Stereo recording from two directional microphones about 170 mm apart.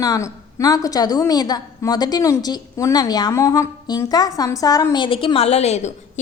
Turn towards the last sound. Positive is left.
turn(degrees=40)  # may be behind; listen again after turning